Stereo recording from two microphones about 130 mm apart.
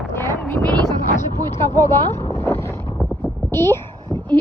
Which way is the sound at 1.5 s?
20° left (ahead or behind).